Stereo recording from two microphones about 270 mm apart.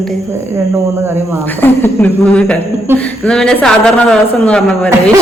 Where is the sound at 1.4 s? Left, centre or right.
Centre.